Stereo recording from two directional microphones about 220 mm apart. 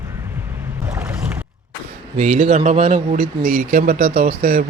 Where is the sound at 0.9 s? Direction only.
5° right (ahead or behind).